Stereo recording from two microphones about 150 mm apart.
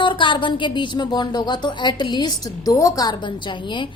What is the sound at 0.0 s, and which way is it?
Speech, 35° left (ahead or behind).